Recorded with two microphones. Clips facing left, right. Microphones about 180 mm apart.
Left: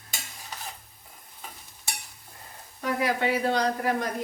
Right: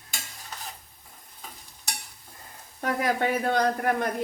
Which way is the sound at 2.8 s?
50° right (ahead or behind).